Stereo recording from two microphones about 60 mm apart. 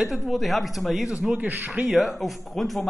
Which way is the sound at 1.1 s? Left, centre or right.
Centre.